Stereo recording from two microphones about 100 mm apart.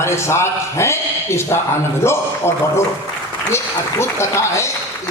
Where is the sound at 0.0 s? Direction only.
25° left (ahead or behind).